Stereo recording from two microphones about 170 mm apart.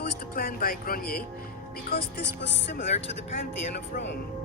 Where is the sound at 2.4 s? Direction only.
90° left.